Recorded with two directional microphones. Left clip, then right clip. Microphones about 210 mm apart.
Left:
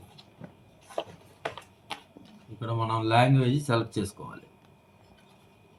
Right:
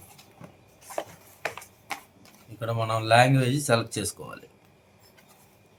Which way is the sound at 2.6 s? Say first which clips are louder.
Right 2 dB; 40° right (ahead or behind).